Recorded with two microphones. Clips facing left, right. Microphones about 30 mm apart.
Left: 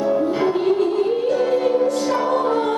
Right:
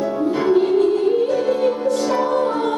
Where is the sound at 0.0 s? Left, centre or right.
Centre.